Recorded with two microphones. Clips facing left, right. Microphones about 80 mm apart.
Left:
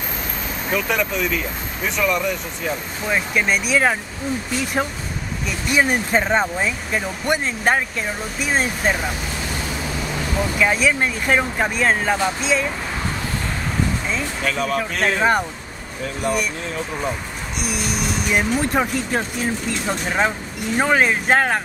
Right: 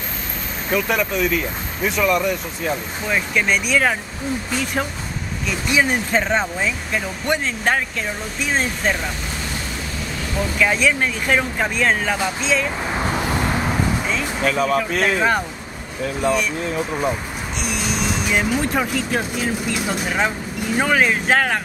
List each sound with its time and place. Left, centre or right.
0.7 s speech: centre
5.7 s speech: centre
10.6 s speech: centre
13.3 s vehicle: right
14.4 s speech: centre
16.7 s speech: centre
17.6 s speech: centre
18.8 s speech: centre